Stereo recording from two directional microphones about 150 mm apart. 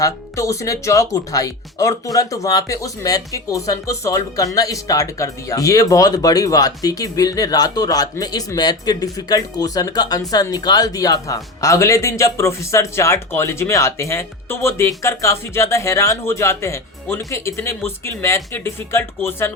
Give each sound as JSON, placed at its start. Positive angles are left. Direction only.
{"t": 0.0, "sound": "speech", "side_deg": 20}